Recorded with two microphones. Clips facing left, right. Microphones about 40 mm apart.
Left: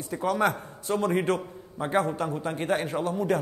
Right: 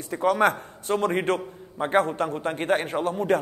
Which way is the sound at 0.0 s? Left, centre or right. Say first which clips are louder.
Right 4 dB; right.